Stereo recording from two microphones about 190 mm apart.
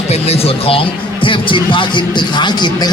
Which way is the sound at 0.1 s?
30° left (ahead or behind).